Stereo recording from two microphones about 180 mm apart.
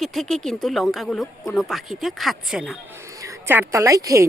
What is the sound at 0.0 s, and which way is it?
Speech, centre (ahead or behind).